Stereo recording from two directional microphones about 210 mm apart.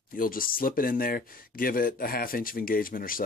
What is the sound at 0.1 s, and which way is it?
Speech, 40° left (ahead or behind).